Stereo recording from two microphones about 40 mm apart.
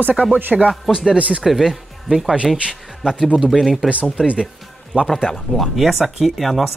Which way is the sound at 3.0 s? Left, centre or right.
Right.